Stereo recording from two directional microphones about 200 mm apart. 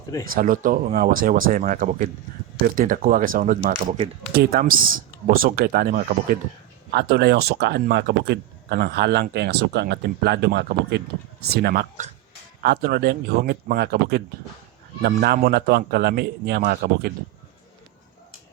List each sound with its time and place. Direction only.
0.3 s speech: 45° right (ahead or behind)
3.7 s speech: 30° right (ahead or behind)
4.6 s speech: 45° right (ahead or behind)
6.9 s speech: 55° right (ahead or behind)